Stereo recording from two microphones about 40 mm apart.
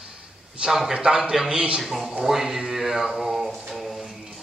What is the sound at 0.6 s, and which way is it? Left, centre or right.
Speech, right.